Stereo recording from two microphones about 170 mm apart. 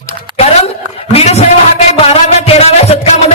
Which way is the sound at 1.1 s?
40° left (ahead or behind).